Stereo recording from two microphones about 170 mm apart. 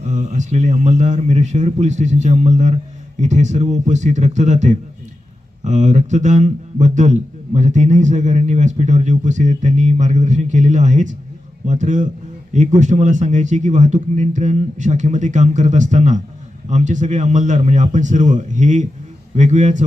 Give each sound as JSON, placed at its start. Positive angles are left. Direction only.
{"t": 0.1, "sound": "a man's voice", "side_deg": -45}